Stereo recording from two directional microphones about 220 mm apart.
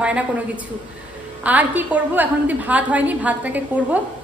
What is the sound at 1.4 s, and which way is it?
A woman's voice, 5° right (ahead or behind).